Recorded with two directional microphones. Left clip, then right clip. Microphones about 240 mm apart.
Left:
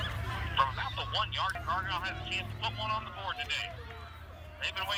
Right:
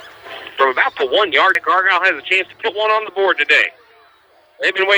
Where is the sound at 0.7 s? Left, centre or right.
Centre.